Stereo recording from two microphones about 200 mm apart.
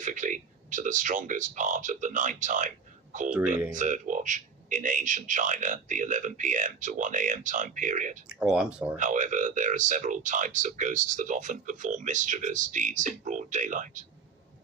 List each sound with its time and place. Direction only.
0.0 s speech: 40° right (ahead or behind)
3.2 s speech: 5° right (ahead or behind)
3.7 s speech: 40° right (ahead or behind)
8.3 s speech: 5° right (ahead or behind)
9.0 s speech: 40° right (ahead or behind)